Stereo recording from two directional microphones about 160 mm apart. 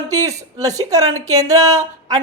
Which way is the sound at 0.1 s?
20° right (ahead or behind).